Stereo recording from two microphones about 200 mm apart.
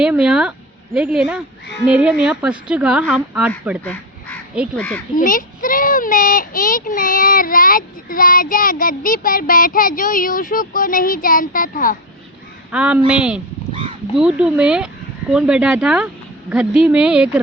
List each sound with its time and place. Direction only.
0.0 s a woman's voice: 5° right (ahead or behind)
5.1 s a child's voice: 45° left (ahead or behind)
12.7 s a woman's voice: 5° right (ahead or behind)